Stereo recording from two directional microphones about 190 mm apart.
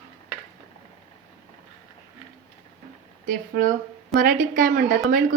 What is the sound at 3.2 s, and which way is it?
A woman's voice, 45° right (ahead or behind).